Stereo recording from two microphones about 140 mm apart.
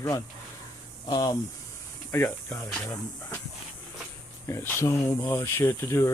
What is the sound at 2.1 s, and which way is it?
Speech, 15° left (ahead or behind).